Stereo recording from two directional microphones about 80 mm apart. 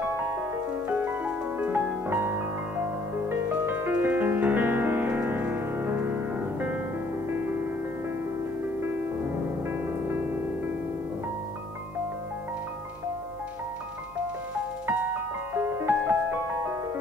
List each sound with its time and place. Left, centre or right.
0.4 s music: right
15.5 s music: right